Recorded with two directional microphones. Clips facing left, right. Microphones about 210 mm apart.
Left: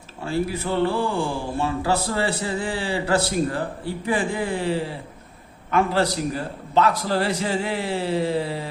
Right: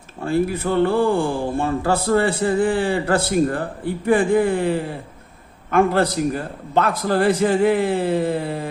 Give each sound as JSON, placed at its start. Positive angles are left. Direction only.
{"t": 0.3, "sound": "speech", "side_deg": -55}